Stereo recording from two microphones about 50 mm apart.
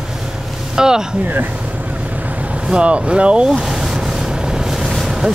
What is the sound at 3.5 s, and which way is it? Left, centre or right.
Boat, centre.